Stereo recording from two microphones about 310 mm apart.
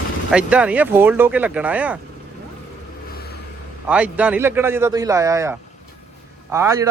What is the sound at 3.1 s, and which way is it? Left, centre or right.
Vehicle, left.